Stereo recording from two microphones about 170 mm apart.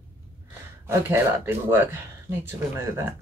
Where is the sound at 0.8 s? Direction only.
15° right (ahead or behind).